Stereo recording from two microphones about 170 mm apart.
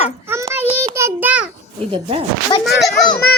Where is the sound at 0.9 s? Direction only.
15° right (ahead or behind).